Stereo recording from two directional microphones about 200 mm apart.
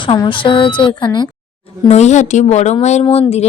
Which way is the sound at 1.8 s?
35° left (ahead or behind).